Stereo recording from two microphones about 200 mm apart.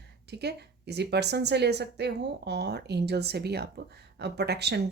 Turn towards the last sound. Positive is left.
turn(degrees=-55)  # may be behind; listen again after turning